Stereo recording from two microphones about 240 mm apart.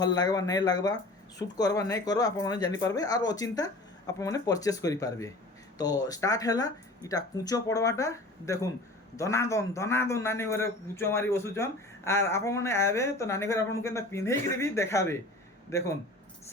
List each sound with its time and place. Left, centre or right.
0.0 s a man's voice: centre